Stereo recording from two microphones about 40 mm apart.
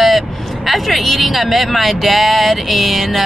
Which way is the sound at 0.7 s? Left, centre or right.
Centre.